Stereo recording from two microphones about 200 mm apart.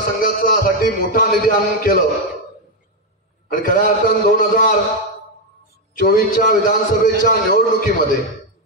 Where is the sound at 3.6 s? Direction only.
45° left (ahead or behind).